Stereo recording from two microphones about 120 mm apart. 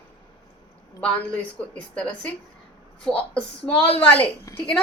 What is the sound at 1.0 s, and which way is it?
Speech, 10° left (ahead or behind).